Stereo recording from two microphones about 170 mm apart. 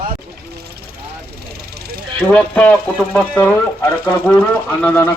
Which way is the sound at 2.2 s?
10° left (ahead or behind).